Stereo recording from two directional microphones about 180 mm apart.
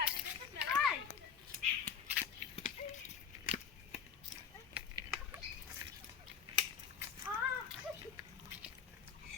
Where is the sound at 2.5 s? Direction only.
45° left (ahead or behind).